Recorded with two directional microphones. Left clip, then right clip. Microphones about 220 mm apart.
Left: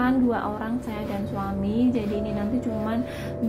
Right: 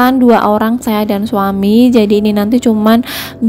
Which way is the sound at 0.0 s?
50° right (ahead or behind).